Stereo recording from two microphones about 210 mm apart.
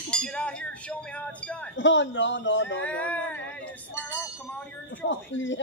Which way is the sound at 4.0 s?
60° right (ahead or behind).